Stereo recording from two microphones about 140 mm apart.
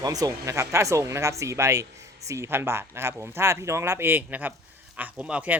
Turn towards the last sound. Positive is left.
turn(degrees=-10)  # may be behind; listen again after turning